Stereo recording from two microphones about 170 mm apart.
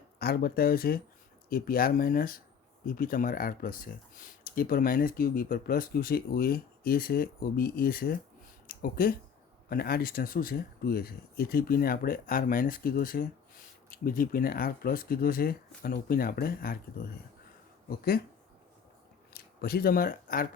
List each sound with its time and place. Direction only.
0.2 s speech: 65° left (ahead or behind)
19.3 s speech: 65° left (ahead or behind)